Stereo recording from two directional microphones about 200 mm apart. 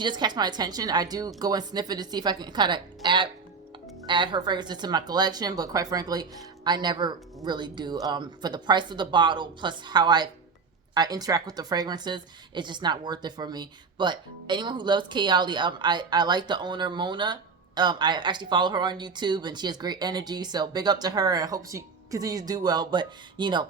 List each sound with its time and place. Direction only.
0.0 s speech: 20° right (ahead or behind)